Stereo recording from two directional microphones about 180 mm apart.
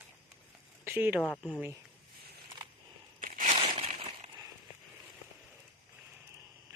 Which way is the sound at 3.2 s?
50° right (ahead or behind).